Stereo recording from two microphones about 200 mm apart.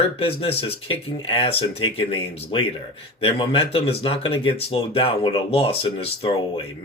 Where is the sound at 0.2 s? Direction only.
25° left (ahead or behind).